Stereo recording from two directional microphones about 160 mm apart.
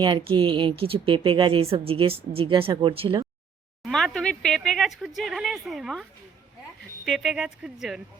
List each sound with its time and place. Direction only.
0.0 s speech: 30° right (ahead or behind)
3.8 s speech: centre (ahead or behind)